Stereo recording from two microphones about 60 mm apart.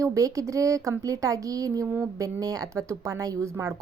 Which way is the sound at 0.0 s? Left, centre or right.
Right.